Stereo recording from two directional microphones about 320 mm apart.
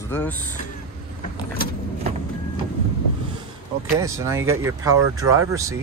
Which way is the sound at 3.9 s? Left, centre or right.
Centre.